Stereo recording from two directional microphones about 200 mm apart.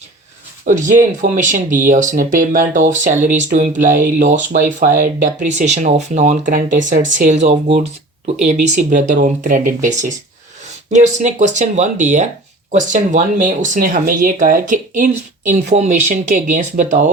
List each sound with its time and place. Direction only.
0.6 s speech: 40° right (ahead or behind)